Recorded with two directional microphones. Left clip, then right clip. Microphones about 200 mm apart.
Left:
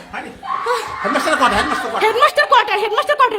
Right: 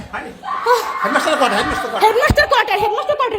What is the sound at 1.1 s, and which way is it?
Speech, 15° left (ahead or behind).